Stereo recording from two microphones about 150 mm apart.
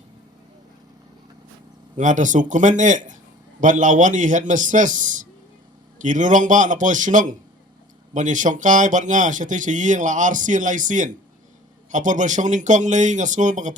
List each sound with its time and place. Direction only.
2.0 s speech: 55° right (ahead or behind)